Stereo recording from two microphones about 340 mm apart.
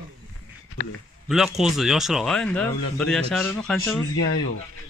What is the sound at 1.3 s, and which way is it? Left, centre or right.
Speech, centre.